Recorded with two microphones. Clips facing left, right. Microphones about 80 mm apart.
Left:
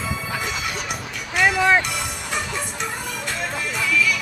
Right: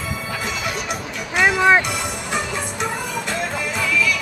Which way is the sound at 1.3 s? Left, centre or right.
Centre.